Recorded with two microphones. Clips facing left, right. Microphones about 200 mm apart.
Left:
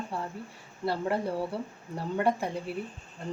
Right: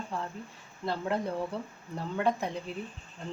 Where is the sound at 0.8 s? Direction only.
10° left (ahead or behind).